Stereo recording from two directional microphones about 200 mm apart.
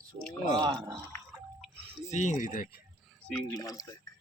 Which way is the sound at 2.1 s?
35° left (ahead or behind).